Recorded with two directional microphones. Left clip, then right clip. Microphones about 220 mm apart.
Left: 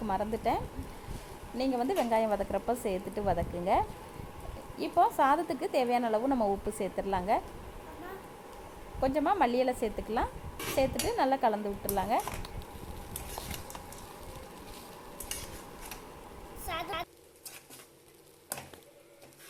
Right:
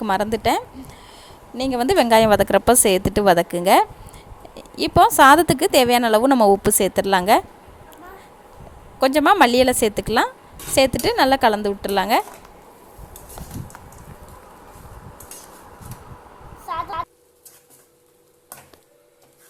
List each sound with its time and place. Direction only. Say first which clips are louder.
0.0 s a woman's voice: right 12 dB; 45° right (ahead or behind)
9.0 s a woman's voice: right 14 dB; 45° right (ahead or behind)